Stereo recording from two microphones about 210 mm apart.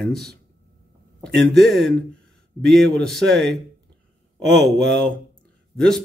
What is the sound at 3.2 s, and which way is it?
Speech, 50° right (ahead or behind).